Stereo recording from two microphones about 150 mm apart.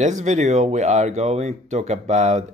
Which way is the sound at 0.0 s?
50° right (ahead or behind).